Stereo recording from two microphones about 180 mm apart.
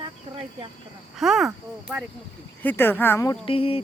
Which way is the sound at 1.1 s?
Centre (ahead or behind).